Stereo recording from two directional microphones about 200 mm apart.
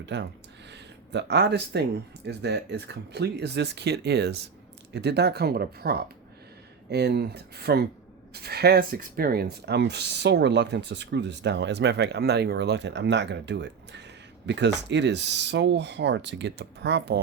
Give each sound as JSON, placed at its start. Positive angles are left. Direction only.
{"t": 0.0, "sound": "speech", "side_deg": -60}